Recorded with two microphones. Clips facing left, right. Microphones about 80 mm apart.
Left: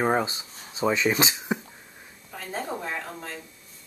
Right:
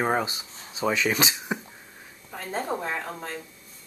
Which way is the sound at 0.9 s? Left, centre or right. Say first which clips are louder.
Left 1 dB; left.